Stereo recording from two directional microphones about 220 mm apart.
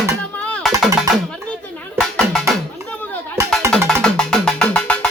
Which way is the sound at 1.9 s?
Centre (ahead or behind).